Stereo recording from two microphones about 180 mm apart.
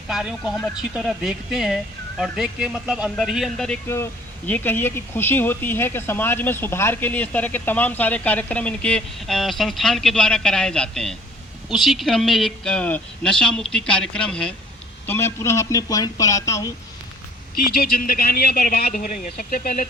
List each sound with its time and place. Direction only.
0.1 s speech: 5° right (ahead or behind)
3.8 s speech: 15° left (ahead or behind)
17.7 s speech: 55° left (ahead or behind)